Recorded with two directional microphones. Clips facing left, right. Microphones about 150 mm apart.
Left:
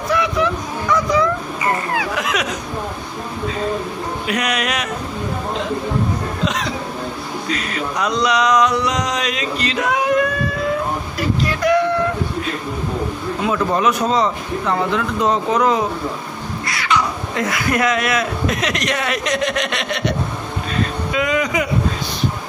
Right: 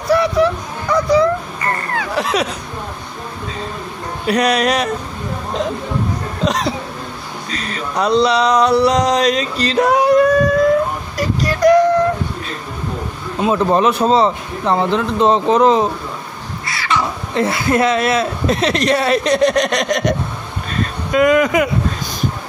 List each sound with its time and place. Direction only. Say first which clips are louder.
0.1 s speech: right 5 dB; 35° right (ahead or behind)
1.6 s speech: left 1 dB; 10° left (ahead or behind)
2.1 s speech: right 4 dB; 30° right (ahead or behind)
4.3 s speech: right 8 dB; 35° right (ahead or behind)
6.4 s speech: right 6 dB; 35° right (ahead or behind)
7.4 s a sound: left 1 dB; 35° right (ahead or behind)
13.4 s speech: right 5 dB; 30° right (ahead or behind)
16.6 s crow: even; centre (ahead or behind)
17.3 s speech: right 7 dB; 30° right (ahead or behind); by 21.6 s 55° right (ahead or behind)